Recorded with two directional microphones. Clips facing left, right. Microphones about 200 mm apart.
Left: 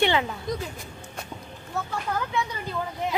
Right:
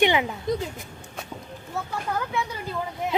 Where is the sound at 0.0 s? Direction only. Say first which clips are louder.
Right 2 dB; 15° right (ahead or behind).